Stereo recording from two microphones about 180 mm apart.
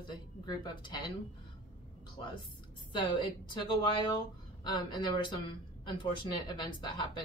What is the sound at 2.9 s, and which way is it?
Speech, 25° left (ahead or behind).